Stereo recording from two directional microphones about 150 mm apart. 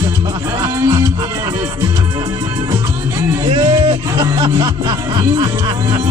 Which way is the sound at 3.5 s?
35° right (ahead or behind).